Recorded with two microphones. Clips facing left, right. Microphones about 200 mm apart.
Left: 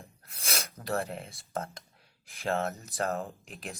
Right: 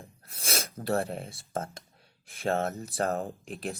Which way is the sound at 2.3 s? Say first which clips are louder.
Right 2 dB; 35° right (ahead or behind).